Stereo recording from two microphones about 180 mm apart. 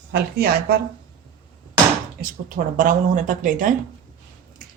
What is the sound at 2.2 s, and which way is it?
Speech, 50° right (ahead or behind).